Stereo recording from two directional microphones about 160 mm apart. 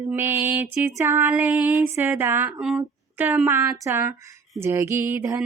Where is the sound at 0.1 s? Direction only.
15° right (ahead or behind).